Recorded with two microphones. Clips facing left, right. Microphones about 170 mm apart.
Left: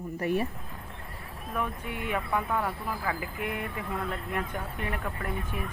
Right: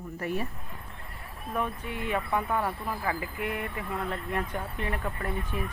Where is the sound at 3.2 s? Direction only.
20° left (ahead or behind).